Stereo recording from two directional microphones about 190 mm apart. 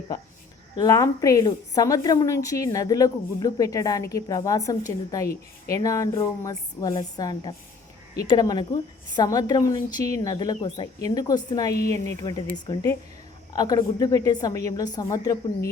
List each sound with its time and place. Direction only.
0.8 s a woman's voice: 15° left (ahead or behind)